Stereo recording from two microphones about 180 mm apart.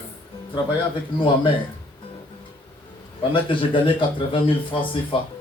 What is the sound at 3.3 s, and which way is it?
A man's voice, 30° left (ahead or behind).